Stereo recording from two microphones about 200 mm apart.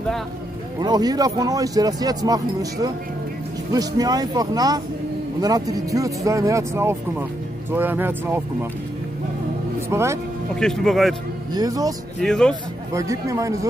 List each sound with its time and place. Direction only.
0.7 s speech: 20° right (ahead or behind)
9.8 s speech: 15° right (ahead or behind)
10.5 s speech: 5° left (ahead or behind)
11.5 s speech: 20° right (ahead or behind)
12.2 s speech: 5° left (ahead or behind)
12.9 s speech: 15° right (ahead or behind)